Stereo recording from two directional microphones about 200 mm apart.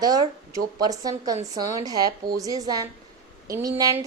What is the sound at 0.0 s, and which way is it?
A woman's voice, 20° right (ahead or behind).